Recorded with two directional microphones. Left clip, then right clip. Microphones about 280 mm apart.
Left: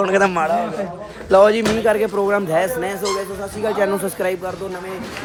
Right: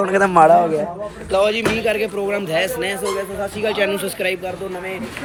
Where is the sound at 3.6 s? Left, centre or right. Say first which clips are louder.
Left 1 dB; left.